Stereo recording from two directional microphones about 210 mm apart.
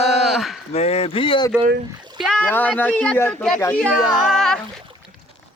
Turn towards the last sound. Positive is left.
turn(degrees=0)  # may be behind; listen again after turning